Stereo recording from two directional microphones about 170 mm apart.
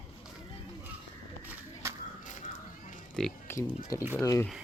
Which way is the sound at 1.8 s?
15° right (ahead or behind).